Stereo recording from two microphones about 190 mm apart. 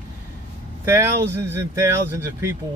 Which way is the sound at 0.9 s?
15° right (ahead or behind).